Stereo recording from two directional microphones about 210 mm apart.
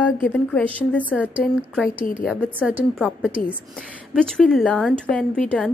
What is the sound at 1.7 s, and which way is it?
A woman's voice, 5° right (ahead or behind).